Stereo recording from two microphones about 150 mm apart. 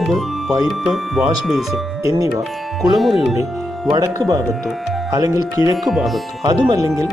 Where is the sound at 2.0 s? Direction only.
25° right (ahead or behind).